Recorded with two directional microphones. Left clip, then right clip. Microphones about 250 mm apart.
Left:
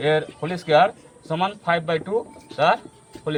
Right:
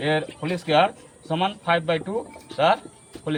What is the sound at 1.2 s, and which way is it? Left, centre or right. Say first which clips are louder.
Speech: left 1 dB; left.